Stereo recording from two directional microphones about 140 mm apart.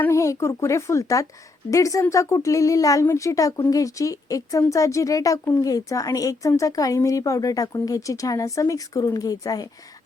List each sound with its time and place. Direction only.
0.0 s speech: 20° left (ahead or behind)